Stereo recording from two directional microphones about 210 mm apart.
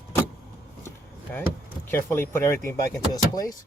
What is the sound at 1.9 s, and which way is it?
Speech, 10° left (ahead or behind).